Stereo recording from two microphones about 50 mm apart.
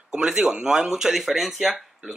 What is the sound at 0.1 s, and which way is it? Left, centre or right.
Speech, centre.